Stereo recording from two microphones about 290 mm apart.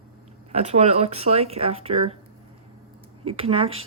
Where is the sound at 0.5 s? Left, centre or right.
Right.